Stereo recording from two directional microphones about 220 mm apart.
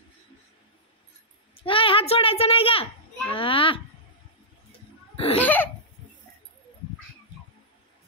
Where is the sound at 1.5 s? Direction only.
25° left (ahead or behind).